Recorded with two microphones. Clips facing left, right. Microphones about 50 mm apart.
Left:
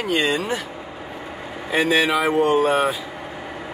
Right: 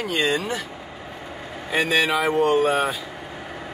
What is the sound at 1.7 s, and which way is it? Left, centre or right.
A man's voice, centre.